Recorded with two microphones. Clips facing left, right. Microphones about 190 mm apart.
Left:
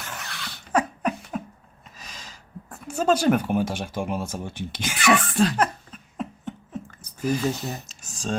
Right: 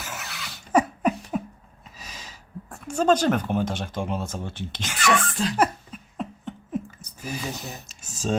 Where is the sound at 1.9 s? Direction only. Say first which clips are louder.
Right 1 dB; 5° right (ahead or behind); by 5.1 s 10° left (ahead or behind).